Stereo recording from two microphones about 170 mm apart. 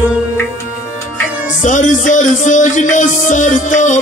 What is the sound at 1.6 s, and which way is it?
Music, 45° left (ahead or behind).